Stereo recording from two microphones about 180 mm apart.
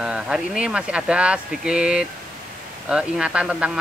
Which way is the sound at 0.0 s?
5° right (ahead or behind).